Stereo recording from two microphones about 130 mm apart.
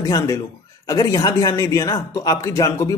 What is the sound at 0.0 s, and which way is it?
Speech, 25° left (ahead or behind).